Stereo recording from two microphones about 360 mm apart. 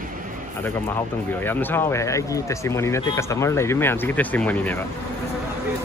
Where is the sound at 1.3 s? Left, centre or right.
Centre.